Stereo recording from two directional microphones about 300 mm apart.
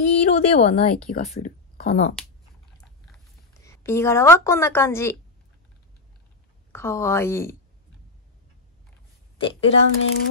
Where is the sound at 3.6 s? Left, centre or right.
Centre.